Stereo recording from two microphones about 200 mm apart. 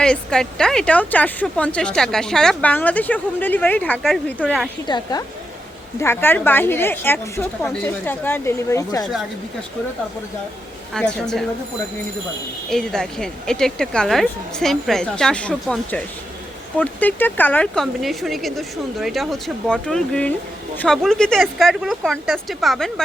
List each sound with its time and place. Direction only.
0.0 s speech: 5° left (ahead or behind)
4.9 s a woman's voice: 20° left (ahead or behind)
6.0 s a woman's voice: 10° left (ahead or behind)
10.9 s speech: 5° left (ahead or behind)
12.7 s speech: 5° left (ahead or behind)